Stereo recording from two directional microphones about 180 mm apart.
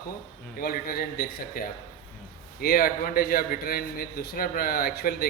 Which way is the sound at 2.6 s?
55° left (ahead or behind).